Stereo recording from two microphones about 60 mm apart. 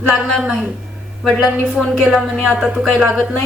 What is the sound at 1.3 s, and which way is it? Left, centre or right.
Speech, centre.